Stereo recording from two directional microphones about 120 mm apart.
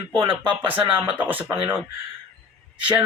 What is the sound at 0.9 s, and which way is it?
Speech, 15° right (ahead or behind).